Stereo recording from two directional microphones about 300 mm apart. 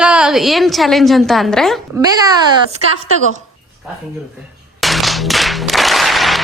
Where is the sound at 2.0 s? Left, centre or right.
Centre.